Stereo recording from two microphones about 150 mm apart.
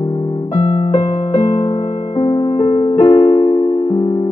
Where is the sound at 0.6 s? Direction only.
40° left (ahead or behind).